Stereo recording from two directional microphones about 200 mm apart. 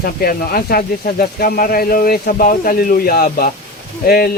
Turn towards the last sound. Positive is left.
turn(degrees=50)  # may be behind; listen again after turning